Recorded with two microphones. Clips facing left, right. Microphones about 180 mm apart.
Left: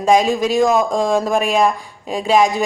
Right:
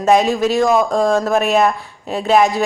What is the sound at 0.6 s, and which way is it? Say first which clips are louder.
Speech: even; centre (ahead or behind).